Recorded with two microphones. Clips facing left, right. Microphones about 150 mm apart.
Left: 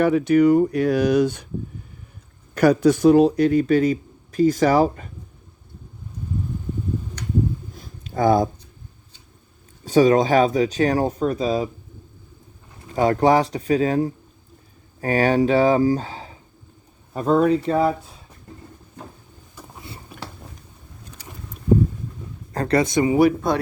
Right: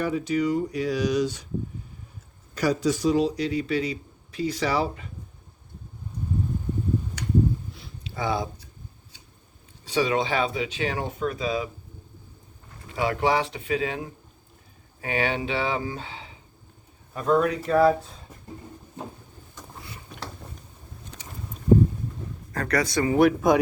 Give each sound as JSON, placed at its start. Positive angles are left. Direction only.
{"t": 0.0, "sound": "speech", "side_deg": 65}
{"t": 2.6, "sound": "speech", "side_deg": 60}
{"t": 7.7, "sound": "a sound", "side_deg": 45}
{"t": 9.8, "sound": "speech", "side_deg": 45}
{"t": 12.9, "sound": "speech", "side_deg": 40}
{"t": 17.7, "sound": "speech", "side_deg": 20}
{"t": 19.6, "sound": "a sound", "side_deg": 10}
{"t": 22.5, "sound": "speech", "side_deg": 25}